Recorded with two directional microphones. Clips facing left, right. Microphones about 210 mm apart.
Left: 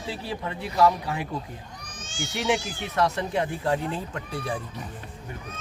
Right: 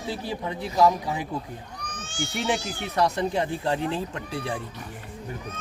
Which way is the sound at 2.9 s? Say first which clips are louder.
Right 1 dB; 15° right (ahead or behind).